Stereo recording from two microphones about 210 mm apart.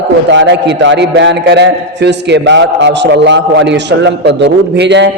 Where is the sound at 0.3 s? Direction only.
55° right (ahead or behind).